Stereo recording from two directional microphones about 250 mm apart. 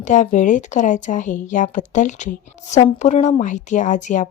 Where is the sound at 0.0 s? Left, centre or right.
Left.